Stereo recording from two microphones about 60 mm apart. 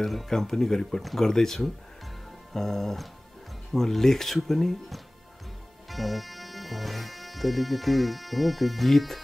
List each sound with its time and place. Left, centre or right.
0.0 s speech: centre
2.5 s music: centre
3.7 s speech: centre